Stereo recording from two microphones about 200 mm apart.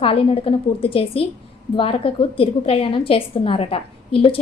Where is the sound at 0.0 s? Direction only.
30° left (ahead or behind).